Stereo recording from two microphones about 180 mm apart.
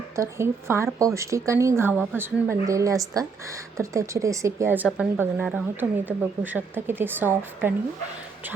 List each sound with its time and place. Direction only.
0.2 s speech: 15° right (ahead or behind)